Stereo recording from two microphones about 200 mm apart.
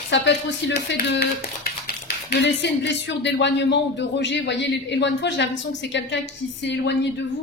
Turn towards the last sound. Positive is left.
turn(degrees=60)  # may be behind; listen again after turning